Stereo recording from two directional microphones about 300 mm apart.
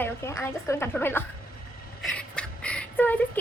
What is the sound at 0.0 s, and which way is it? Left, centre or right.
A woman's voice, centre.